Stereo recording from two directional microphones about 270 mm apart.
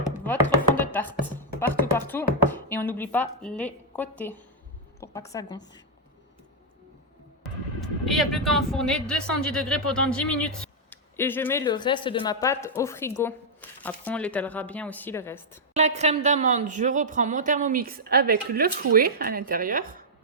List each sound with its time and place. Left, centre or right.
0.8 s music: centre
4.9 s a woman's voice: centre
7.8 s speech: centre
15.7 s a woman's voice: right